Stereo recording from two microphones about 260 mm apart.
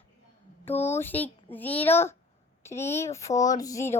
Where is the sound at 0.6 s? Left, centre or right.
Centre.